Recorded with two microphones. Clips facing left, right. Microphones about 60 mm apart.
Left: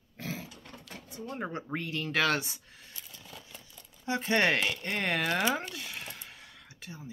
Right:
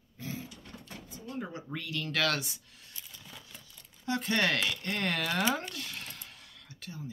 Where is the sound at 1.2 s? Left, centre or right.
Left.